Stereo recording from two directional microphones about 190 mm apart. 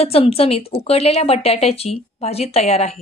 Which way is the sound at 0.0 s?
30° left (ahead or behind).